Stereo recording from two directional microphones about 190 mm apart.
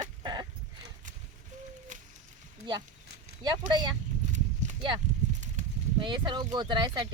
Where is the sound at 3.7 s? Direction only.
20° right (ahead or behind).